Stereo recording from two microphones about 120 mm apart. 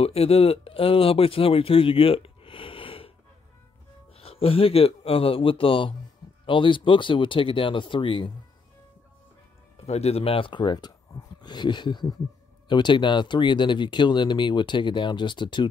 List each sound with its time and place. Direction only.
0.0 s speech: 55° left (ahead or behind)
4.2 s speech: 55° left (ahead or behind)
9.8 s speech: 60° left (ahead or behind); by 15.7 s 40° left (ahead or behind)